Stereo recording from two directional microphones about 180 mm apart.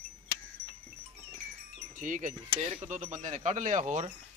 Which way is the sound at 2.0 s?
45° right (ahead or behind).